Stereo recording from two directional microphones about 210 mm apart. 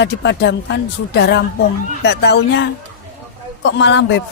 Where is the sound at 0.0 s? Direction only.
55° left (ahead or behind).